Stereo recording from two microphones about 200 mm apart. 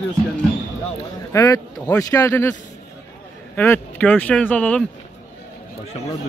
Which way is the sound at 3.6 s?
10° left (ahead or behind).